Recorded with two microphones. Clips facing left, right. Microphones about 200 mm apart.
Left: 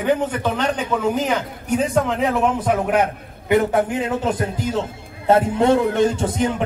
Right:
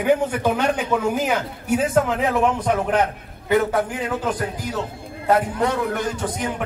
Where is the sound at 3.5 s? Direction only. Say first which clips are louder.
Left 2 dB; 20° left (ahead or behind).